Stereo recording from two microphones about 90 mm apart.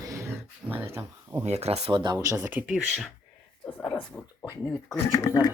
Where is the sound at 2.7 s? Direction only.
Centre (ahead or behind).